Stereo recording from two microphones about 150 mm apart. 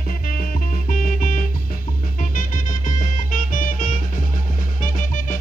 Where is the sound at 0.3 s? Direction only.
70° left (ahead or behind).